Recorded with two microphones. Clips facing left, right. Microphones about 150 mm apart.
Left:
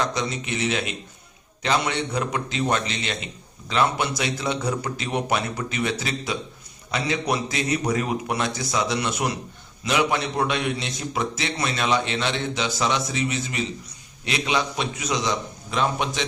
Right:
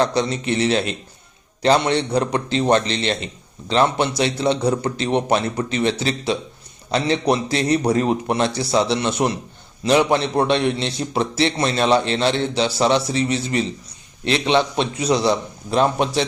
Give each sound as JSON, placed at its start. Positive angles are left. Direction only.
{"t": 0.0, "sound": "a man's voice", "side_deg": -30}